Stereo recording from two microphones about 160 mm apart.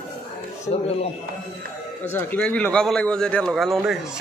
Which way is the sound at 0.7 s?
40° left (ahead or behind).